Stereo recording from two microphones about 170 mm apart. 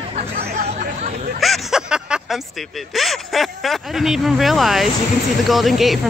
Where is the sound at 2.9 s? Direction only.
Centre (ahead or behind).